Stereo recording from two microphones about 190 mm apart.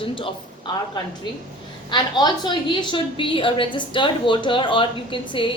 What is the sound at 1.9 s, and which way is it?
A woman's voice, 25° left (ahead or behind).